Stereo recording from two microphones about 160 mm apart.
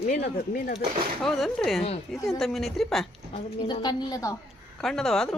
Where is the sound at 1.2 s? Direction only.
Centre (ahead or behind).